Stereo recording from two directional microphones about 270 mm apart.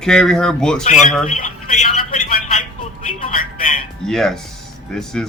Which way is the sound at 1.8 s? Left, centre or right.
Left.